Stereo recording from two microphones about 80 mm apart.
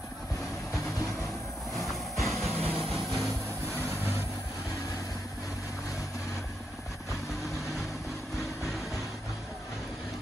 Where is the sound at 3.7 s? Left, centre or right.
Right.